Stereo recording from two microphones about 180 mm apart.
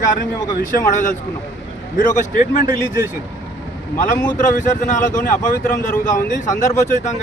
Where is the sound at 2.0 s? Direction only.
45° left (ahead or behind).